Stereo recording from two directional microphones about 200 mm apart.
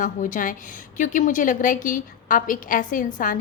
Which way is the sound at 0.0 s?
40° left (ahead or behind).